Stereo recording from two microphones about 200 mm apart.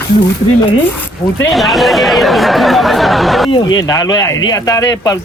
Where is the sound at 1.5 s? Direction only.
Centre (ahead or behind).